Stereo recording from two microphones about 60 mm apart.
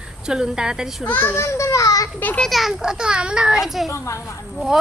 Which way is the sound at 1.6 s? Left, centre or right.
Left.